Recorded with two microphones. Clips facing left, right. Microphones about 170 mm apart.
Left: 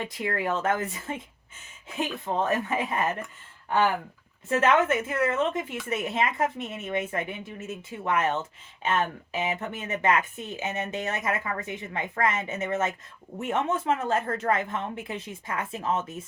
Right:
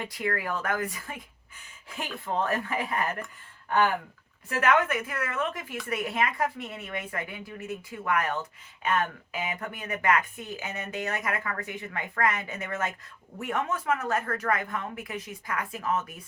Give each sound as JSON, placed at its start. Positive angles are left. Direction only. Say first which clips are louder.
{"t": 0.0, "sound": "a woman's voice", "louder": "left 2 dB", "side_deg": 20}
{"t": 4.4, "sound": "a woman's voice", "louder": "left 3 dB", "side_deg": 25}